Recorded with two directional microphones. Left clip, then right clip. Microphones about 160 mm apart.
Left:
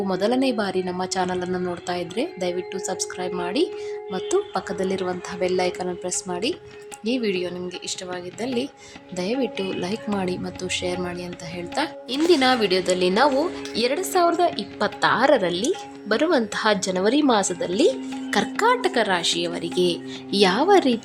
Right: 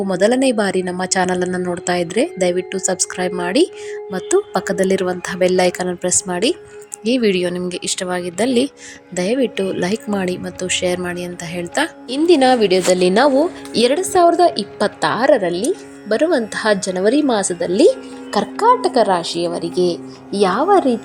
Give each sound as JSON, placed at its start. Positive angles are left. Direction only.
{"t": 0.1, "sound": "speech", "side_deg": -20}
{"t": 9.1, "sound": "speech", "side_deg": -20}
{"t": 14.0, "sound": "a woman's voice", "side_deg": -15}